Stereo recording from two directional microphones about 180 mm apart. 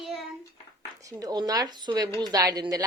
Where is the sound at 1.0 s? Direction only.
20° right (ahead or behind).